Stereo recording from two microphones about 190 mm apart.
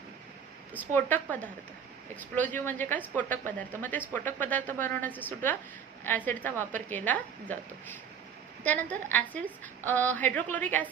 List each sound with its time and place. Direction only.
0.9 s a woman's voice: 10° left (ahead or behind)
8.6 s a woman's voice: 10° left (ahead or behind)